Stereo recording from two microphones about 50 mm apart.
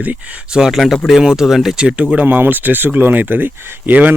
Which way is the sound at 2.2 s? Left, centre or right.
Right.